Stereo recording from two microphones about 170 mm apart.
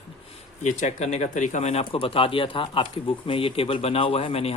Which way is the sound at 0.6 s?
45° left (ahead or behind).